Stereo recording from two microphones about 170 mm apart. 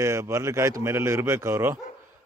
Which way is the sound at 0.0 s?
15° right (ahead or behind).